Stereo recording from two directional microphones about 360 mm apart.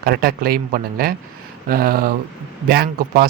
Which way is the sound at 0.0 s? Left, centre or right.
Right.